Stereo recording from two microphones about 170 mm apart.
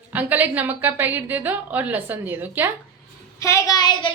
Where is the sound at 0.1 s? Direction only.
10° right (ahead or behind).